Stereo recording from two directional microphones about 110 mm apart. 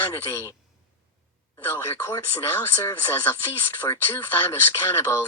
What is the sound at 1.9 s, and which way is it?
Speech, 20° left (ahead or behind).